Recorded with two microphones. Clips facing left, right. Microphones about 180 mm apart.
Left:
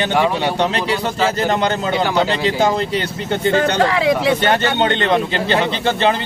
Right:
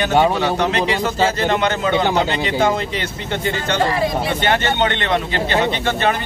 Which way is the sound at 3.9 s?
90° left.